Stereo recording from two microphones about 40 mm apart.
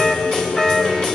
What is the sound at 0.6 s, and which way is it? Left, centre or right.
Music, centre.